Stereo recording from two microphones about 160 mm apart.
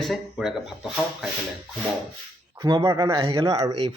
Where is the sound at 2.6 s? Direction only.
20° right (ahead or behind).